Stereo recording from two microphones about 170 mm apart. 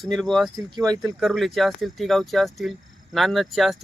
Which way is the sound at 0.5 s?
20° right (ahead or behind).